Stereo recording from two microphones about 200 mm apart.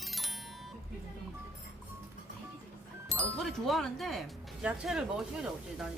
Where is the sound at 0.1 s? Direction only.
Centre (ahead or behind).